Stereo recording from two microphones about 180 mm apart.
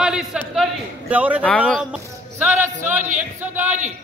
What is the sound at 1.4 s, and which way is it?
Speech, 5° left (ahead or behind).